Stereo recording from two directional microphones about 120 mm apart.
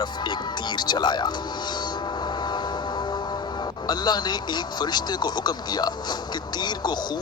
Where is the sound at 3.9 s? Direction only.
35° left (ahead or behind).